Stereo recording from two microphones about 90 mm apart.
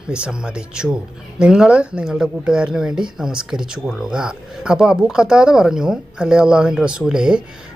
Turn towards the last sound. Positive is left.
turn(degrees=-10)  # may be behind; listen again after turning